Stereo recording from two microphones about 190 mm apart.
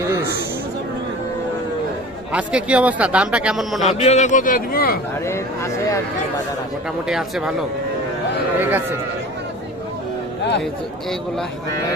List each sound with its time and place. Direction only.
2.3 s a man's voice: 5° right (ahead or behind)
3.8 s a man's voice: 35° left (ahead or behind)
5.2 s speech: 15° left (ahead or behind)
7.1 s a man's voice: 5° right (ahead or behind)
8.5 s a man's voice: 10° right (ahead or behind)
10.6 s a man's voice: centre (ahead or behind)